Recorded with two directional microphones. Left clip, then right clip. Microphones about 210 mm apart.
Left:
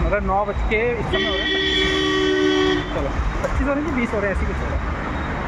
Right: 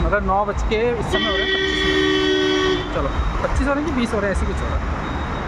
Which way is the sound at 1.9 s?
40° right (ahead or behind).